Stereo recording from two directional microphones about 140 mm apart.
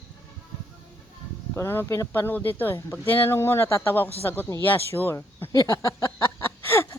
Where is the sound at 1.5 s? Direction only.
15° left (ahead or behind).